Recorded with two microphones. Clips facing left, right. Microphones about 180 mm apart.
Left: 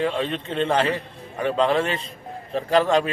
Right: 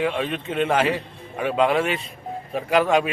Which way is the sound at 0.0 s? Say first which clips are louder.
Even; 10° right (ahead or behind).